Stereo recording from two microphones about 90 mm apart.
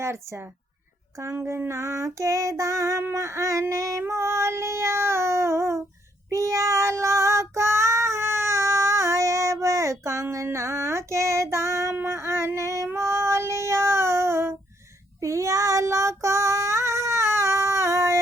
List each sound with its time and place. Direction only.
0.0 s a woman's voice: 30° right (ahead or behind)
1.2 s child singing: 30° right (ahead or behind)